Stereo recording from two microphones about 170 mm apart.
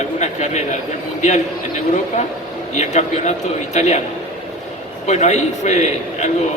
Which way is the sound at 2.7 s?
40° left (ahead or behind).